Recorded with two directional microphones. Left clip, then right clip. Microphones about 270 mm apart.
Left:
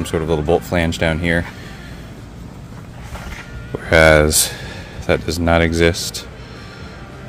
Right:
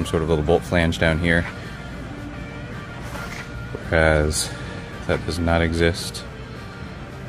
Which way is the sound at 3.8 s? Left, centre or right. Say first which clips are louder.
Left 8 dB; left.